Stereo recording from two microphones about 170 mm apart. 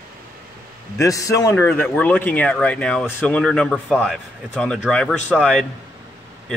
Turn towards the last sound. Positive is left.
turn(degrees=5)  # may be behind; listen again after turning